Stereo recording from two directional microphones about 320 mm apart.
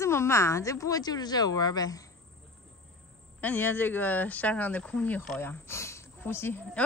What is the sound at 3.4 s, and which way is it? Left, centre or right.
Speech, centre.